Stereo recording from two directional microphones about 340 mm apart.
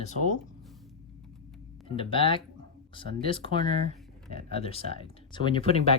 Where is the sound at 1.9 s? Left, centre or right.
Centre.